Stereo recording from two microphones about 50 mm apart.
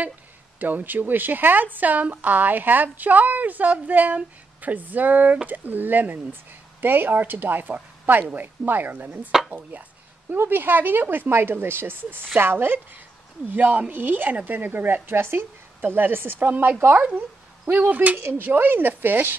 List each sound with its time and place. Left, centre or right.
0.6 s a woman's voice: right
10.3 s a woman's voice: right
18.1 s speech: right